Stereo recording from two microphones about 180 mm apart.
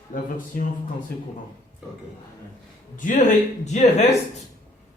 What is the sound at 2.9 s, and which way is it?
Speech, 45° left (ahead or behind).